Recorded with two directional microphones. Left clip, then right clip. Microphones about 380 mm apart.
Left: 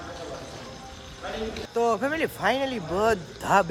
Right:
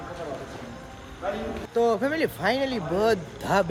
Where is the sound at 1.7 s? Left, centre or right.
Centre.